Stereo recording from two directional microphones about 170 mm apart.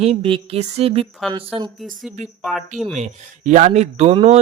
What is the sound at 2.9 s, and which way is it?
Speech, 45° right (ahead or behind).